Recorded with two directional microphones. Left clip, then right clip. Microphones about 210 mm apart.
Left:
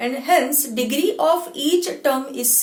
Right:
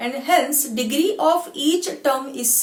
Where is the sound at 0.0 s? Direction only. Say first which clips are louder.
Left 1 dB; 20° left (ahead or behind).